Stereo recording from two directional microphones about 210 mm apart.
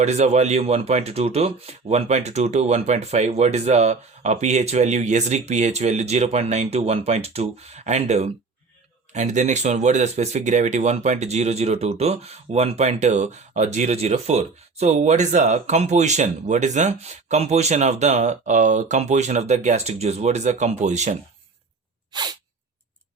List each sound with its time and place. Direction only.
0.0 s speech: 30° right (ahead or behind)
22.1 s sneeze: 20° right (ahead or behind)